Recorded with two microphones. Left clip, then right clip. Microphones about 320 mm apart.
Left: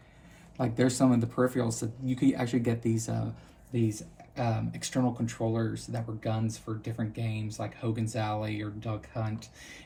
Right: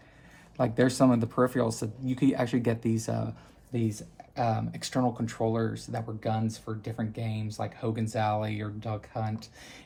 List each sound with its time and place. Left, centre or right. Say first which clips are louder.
0.5 s speech: right 3 dB; right